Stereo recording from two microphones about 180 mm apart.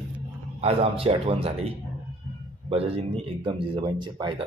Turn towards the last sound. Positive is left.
turn(degrees=-25)  # may be behind; listen again after turning